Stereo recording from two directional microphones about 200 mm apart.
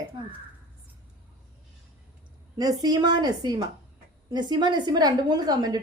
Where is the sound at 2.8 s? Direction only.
20° right (ahead or behind).